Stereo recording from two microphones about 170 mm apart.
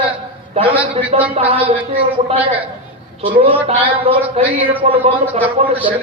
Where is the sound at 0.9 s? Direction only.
35° right (ahead or behind).